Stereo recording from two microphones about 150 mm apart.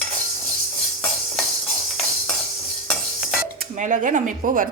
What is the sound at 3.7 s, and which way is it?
Speech, 60° right (ahead or behind).